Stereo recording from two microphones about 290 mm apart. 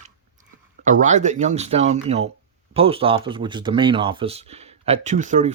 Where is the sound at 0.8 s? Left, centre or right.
Right.